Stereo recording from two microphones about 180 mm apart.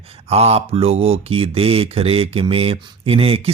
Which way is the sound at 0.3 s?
35° right (ahead or behind).